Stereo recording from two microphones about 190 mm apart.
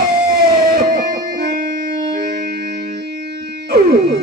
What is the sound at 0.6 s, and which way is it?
Music, 50° right (ahead or behind).